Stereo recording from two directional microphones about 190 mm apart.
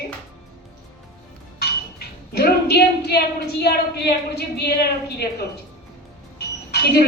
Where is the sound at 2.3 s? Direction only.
55° left (ahead or behind).